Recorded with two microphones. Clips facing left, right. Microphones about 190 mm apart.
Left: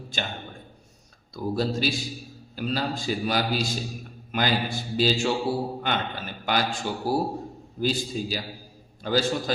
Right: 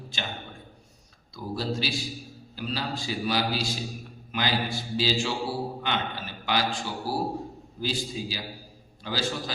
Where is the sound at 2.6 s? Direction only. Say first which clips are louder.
Left 4 dB; 50° left (ahead or behind).